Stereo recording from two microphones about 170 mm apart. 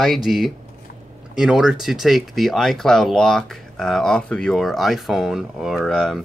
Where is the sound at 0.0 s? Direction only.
Centre (ahead or behind).